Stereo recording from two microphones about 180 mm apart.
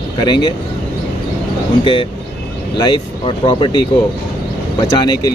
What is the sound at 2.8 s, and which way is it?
Speech, 25° left (ahead or behind).